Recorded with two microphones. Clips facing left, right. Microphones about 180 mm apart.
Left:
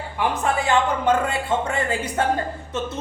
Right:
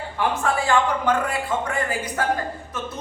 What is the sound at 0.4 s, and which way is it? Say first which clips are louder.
Speech: left 1 dB; 20° left (ahead or behind).